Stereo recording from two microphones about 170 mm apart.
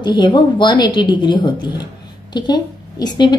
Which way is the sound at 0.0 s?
25° left (ahead or behind).